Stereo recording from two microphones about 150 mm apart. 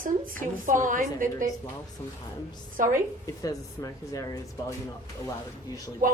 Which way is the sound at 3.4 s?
20° left (ahead or behind).